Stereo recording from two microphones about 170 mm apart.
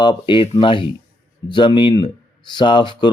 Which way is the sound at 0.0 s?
30° left (ahead or behind).